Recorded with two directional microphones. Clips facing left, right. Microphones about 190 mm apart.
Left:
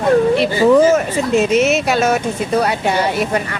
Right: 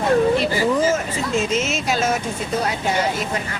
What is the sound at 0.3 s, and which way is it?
Speech, 65° left (ahead or behind).